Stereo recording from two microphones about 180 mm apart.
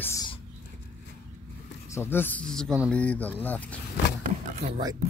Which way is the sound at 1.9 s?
10° left (ahead or behind).